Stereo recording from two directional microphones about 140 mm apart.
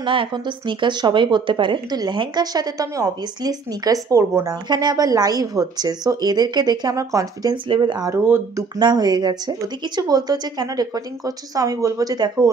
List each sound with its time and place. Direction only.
0.0 s speech: 35° right (ahead or behind)
7.5 s speech: 35° right (ahead or behind)
8.1 s speech: 20° right (ahead or behind)
8.7 s speech: 30° right (ahead or behind)